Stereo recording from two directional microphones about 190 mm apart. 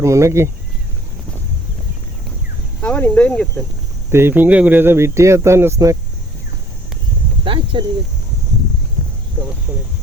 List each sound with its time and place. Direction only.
0.0 s speech: 15° right (ahead or behind)
2.8 s speech: 5° left (ahead or behind)
4.1 s speech: 10° right (ahead or behind)
7.4 s speech: 25° right (ahead or behind)